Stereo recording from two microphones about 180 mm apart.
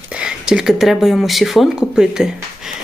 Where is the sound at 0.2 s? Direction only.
5° right (ahead or behind).